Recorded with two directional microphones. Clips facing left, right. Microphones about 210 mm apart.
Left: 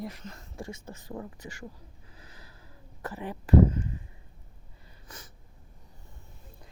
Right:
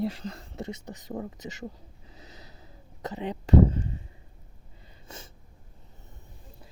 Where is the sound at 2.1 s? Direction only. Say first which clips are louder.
Right 6 dB; 25° right (ahead or behind).